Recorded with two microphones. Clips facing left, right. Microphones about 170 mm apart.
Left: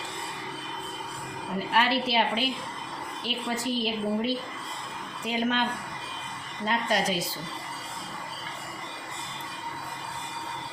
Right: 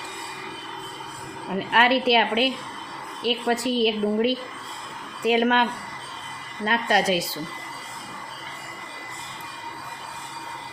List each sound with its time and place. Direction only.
1.7 s a woman's voice: 65° right (ahead or behind)
6.7 s a woman's voice: 70° right (ahead or behind)